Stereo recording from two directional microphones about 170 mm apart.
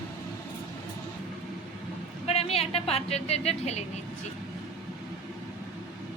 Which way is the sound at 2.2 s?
35° left (ahead or behind).